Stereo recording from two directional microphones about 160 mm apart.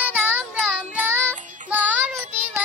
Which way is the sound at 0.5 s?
5° left (ahead or behind).